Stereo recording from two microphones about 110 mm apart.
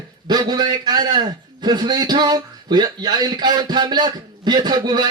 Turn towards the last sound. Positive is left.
turn(degrees=-40)  # may be behind; listen again after turning